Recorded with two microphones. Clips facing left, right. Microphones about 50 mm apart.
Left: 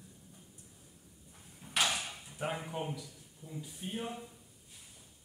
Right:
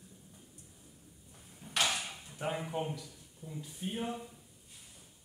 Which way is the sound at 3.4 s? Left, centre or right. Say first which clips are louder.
Right 1 dB; right.